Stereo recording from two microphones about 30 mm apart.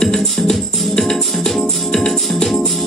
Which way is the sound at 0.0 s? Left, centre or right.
Centre.